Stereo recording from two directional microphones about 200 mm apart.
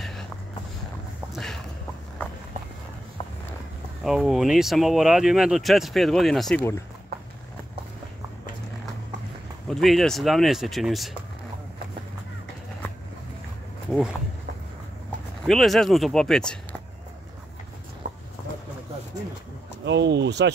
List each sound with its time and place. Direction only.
1.3 s a sound: centre (ahead or behind)
4.0 s speech: centre (ahead or behind)
9.7 s speech: centre (ahead or behind)
15.4 s speech: centre (ahead or behind)
19.8 s speech: 60° right (ahead or behind)